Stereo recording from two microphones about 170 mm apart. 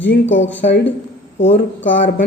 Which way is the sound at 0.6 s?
60° left (ahead or behind).